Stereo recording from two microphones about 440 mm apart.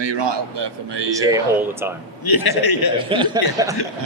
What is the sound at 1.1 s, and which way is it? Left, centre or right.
Speech, centre.